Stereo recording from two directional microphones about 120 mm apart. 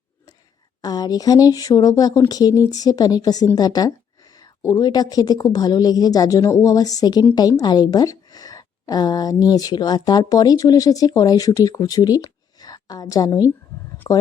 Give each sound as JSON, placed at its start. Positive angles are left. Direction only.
{"t": 0.8, "sound": "speech", "side_deg": 35}